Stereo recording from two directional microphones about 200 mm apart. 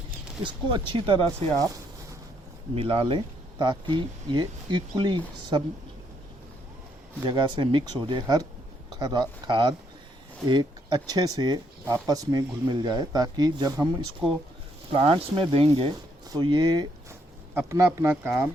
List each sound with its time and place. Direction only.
0.4 s speech: 25° right (ahead or behind)
1.5 s speech: 15° right (ahead or behind)
7.3 s speech: 25° right (ahead or behind)
14.9 s speech: 25° right (ahead or behind)